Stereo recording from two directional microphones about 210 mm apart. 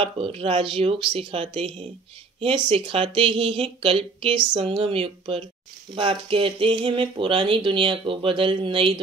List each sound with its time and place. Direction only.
0.0 s speech: 25° right (ahead or behind)